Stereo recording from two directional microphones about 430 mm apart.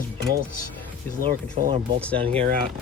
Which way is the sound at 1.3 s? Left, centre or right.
Centre.